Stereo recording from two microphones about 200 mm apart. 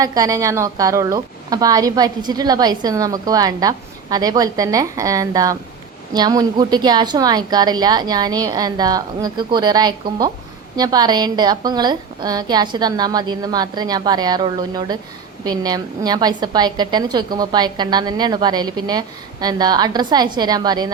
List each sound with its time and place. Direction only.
0.0 s a woman's voice: 15° right (ahead or behind)